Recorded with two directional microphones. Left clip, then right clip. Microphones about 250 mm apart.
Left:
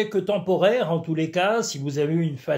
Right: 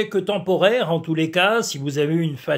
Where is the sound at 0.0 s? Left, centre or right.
Right.